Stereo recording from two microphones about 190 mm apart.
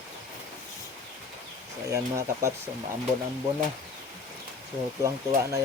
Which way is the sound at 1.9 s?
15° right (ahead or behind).